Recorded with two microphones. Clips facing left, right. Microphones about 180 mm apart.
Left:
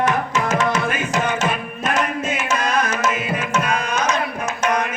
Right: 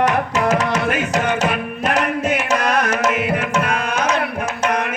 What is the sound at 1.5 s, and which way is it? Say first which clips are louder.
Tabla: right 3 dB; 65° right (ahead or behind).